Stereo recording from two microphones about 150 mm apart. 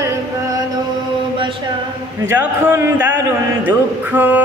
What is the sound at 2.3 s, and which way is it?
Mantra, 15° right (ahead or behind).